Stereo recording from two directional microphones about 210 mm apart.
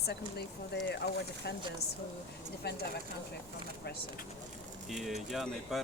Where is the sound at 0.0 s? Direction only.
50° left (ahead or behind).